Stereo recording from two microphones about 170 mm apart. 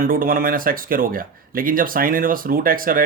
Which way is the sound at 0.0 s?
60° right (ahead or behind).